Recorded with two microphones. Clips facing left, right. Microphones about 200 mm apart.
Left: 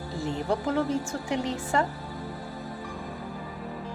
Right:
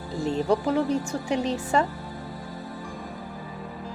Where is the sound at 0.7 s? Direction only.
20° right (ahead or behind).